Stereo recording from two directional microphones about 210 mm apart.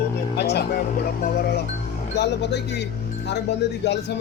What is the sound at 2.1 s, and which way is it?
A man's voice, 55° left (ahead or behind).